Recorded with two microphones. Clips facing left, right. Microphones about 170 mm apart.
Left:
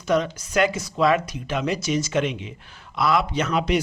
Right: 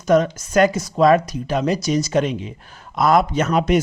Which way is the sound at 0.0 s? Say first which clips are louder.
Right 6 dB; 45° right (ahead or behind).